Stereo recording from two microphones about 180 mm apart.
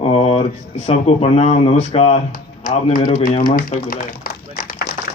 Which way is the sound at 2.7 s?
50° left (ahead or behind).